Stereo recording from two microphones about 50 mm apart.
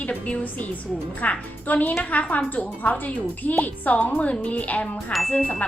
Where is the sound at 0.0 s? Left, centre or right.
Left.